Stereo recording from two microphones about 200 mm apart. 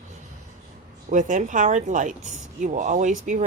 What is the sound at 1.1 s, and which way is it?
A woman's voice, 40° right (ahead or behind).